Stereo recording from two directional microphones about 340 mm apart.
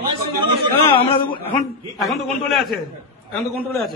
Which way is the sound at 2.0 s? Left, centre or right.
Centre.